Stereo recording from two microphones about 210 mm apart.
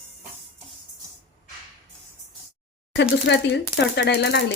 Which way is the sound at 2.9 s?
55° left (ahead or behind).